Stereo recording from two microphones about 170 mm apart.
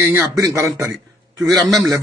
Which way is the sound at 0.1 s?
15° right (ahead or behind).